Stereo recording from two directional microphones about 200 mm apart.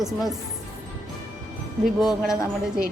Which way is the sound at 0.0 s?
Centre (ahead or behind).